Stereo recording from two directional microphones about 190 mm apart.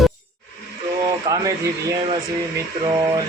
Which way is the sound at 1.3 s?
20° right (ahead or behind).